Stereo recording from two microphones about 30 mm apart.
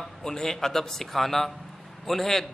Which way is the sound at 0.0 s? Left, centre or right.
Centre.